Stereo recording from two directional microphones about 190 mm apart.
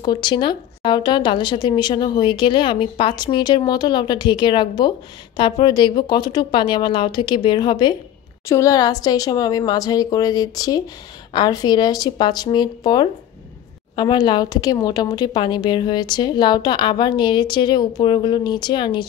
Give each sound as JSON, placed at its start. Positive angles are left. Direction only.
{"t": 0.0, "sound": "speech", "side_deg": 20}